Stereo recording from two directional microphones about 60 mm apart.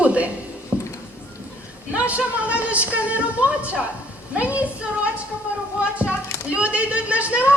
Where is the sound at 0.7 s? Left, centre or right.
Right.